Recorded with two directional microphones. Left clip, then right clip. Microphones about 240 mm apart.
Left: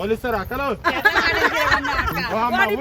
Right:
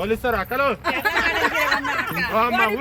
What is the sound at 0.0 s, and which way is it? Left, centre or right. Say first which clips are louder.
Speech: even; left.